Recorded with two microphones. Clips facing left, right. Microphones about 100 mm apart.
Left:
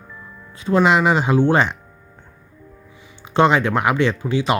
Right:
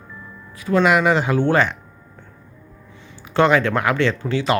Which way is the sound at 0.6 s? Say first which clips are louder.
Left 1 dB; 25° left (ahead or behind).